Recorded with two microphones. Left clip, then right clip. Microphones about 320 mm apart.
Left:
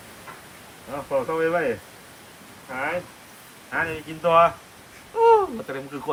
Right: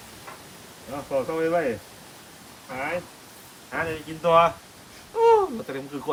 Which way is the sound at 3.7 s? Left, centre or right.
Centre.